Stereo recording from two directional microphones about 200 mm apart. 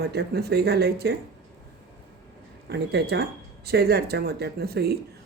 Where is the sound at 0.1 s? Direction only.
55° right (ahead or behind).